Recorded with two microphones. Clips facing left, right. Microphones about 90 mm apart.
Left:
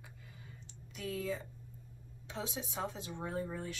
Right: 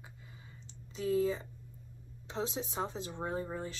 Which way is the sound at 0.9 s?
30° right (ahead or behind).